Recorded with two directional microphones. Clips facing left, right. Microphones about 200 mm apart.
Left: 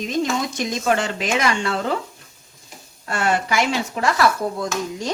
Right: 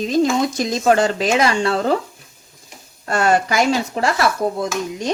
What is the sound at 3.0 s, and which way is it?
Frying, 40° right (ahead or behind).